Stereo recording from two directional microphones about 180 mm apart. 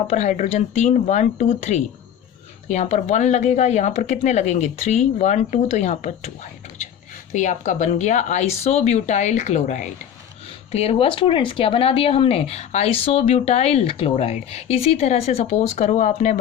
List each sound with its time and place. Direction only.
0.1 s speech: 40° left (ahead or behind)
7.3 s speech: 45° left (ahead or behind)